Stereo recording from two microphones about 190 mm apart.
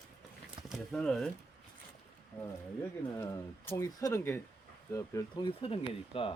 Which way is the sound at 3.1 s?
15° left (ahead or behind).